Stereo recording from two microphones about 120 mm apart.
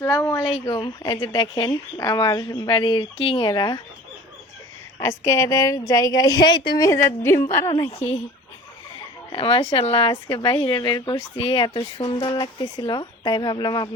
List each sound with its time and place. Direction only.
0.0 s a sound: 20° left (ahead or behind)
0.3 s speech: 45° left (ahead or behind)
4.9 s speech: 25° left (ahead or behind)
7.9 s speech: 55° left (ahead or behind); by 13.9 s 35° left (ahead or behind)